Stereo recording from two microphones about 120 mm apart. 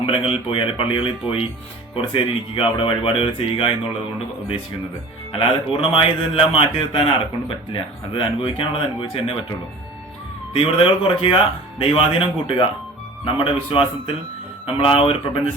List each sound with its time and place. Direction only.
0.0 s a man's voice: 50° left (ahead or behind)
5.3 s a man's voice: 45° left (ahead or behind)
10.5 s a man's voice: 50° left (ahead or behind)